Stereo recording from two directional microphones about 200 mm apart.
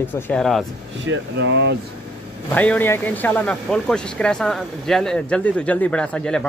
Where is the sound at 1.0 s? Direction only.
65° right (ahead or behind).